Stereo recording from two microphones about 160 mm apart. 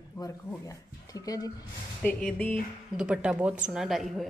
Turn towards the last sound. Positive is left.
turn(degrees=0)  # may be behind; listen again after turning